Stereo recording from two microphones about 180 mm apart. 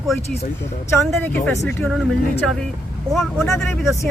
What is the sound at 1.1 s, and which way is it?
Speech, 10° left (ahead or behind).